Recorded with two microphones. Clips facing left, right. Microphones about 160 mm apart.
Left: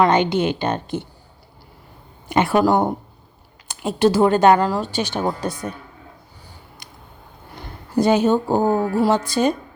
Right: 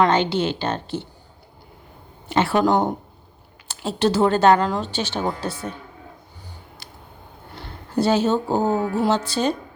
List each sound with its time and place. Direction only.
0.2 s speech: 55° left (ahead or behind)
0.4 s speech: 15° left (ahead or behind)
2.3 s speech: 10° left (ahead or behind)
7.9 s speech: 10° left (ahead or behind)